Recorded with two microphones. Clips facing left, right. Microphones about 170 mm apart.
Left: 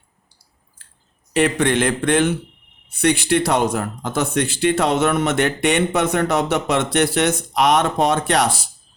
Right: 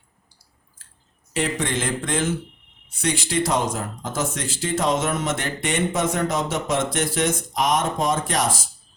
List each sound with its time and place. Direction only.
0.8 s chewing: 65° left (ahead or behind)
1.3 s speech: 65° left (ahead or behind)